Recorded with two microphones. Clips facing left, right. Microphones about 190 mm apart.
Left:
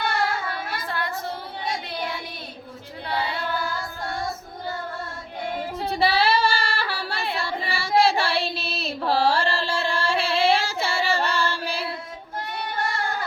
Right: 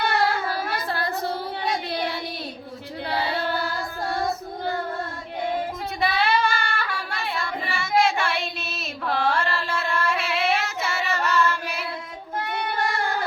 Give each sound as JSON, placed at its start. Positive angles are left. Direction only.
{"t": 0.5, "sound": "child singing", "side_deg": -35}
{"t": 5.9, "sound": "child singing", "side_deg": 30}